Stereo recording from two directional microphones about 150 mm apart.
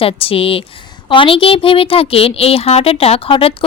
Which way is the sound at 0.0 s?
40° left (ahead or behind).